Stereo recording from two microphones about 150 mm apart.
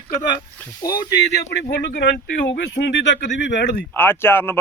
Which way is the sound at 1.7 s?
90° left.